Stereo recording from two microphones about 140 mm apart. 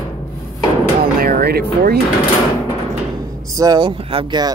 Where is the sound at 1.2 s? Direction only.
90° right.